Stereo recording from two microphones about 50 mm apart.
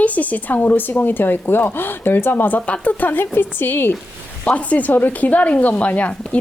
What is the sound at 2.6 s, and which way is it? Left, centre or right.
A woman's voice, left.